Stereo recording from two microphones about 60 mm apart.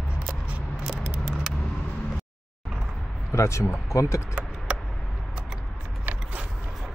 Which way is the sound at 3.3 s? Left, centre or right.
Left.